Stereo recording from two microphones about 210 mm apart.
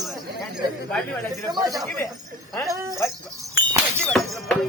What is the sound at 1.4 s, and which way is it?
Speech, 15° right (ahead or behind).